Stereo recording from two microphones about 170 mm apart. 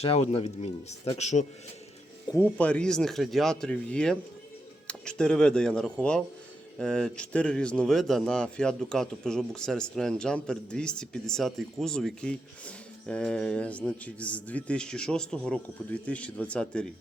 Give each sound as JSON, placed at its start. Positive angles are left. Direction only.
{"t": 0.0, "sound": "speech", "side_deg": 35}
{"t": 2.3, "sound": "speech", "side_deg": 10}